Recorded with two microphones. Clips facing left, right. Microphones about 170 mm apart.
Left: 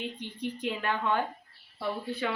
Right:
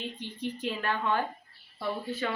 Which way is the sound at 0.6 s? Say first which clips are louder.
Left 1 dB; 15° left (ahead or behind).